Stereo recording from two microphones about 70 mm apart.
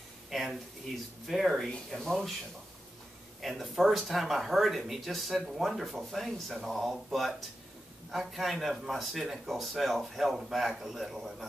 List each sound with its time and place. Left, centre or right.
0.3 s a sound: centre
1.2 s speech: centre
3.3 s speech: centre